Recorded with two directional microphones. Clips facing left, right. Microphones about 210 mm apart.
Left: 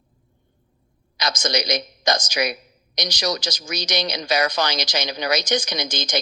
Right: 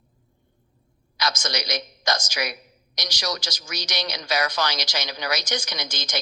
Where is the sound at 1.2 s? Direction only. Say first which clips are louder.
Left 4 dB; 20° left (ahead or behind).